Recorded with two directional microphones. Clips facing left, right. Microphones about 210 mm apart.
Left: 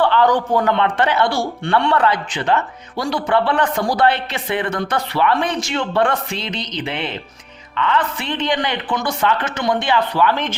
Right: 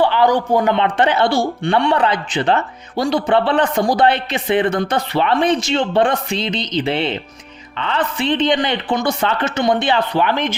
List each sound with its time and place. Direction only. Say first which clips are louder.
0.0 s a man's voice: right 1 dB; 10° right (ahead or behind)